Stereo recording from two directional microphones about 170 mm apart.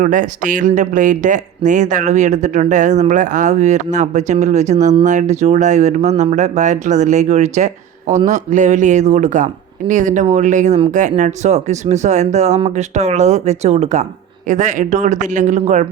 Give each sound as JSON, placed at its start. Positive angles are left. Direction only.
{"t": 0.0, "sound": "speech", "side_deg": -50}